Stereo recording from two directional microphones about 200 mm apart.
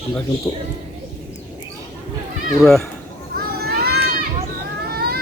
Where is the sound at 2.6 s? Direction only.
Centre (ahead or behind).